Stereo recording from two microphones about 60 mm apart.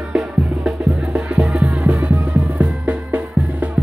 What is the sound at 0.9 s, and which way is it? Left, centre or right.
Music, centre.